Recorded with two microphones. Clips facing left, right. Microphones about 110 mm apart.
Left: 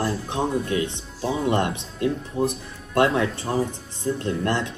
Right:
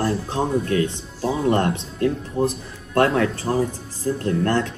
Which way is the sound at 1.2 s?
Centre (ahead or behind).